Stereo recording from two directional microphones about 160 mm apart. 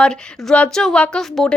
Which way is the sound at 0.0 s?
5° left (ahead or behind).